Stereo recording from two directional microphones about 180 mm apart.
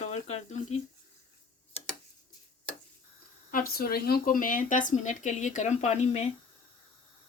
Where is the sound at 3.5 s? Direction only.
55° left (ahead or behind); by 6.3 s 40° left (ahead or behind).